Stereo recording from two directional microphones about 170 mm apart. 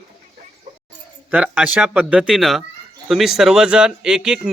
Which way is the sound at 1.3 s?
10° right (ahead or behind).